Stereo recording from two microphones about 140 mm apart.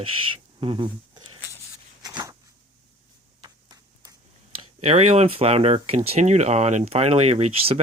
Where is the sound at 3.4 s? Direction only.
25° right (ahead or behind).